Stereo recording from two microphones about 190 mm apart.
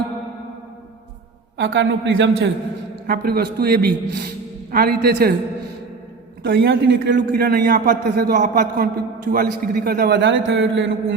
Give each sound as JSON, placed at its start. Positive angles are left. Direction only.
{"t": 1.5, "sound": "a man's voice", "side_deg": -75}
{"t": 3.1, "sound": "a man's voice", "side_deg": -55}
{"t": 6.4, "sound": "a man's voice", "side_deg": -70}
{"t": 7.3, "sound": "a man's voice", "side_deg": -50}